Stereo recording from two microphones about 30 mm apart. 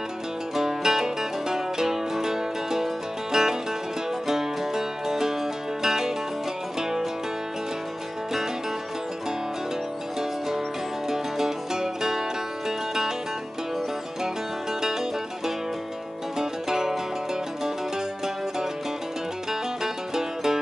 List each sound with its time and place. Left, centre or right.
0.6 s music: centre
11.1 s music: centre
16.3 s music: centre
19.8 s music: centre